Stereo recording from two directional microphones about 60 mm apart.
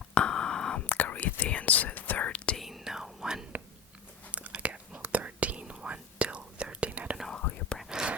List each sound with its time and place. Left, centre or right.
0.1 s sidetone: centre
0.9 s whispering: left
2.6 s whispering: centre
4.3 s whispering: right
7.4 s whispering: left
7.9 s whispering: centre